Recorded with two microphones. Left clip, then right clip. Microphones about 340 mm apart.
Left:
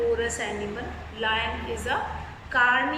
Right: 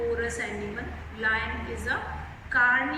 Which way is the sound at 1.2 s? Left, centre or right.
Centre.